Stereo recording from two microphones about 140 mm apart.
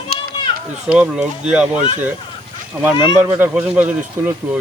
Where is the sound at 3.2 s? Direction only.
15° right (ahead or behind).